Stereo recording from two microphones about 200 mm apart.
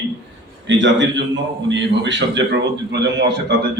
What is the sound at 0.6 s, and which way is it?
A man's voice, 65° right (ahead or behind).